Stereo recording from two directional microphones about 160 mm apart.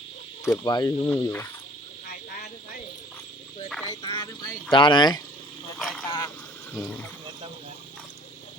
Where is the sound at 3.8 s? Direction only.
25° left (ahead or behind).